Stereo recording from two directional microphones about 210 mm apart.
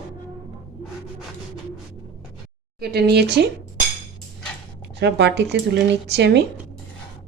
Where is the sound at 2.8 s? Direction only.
50° right (ahead or behind).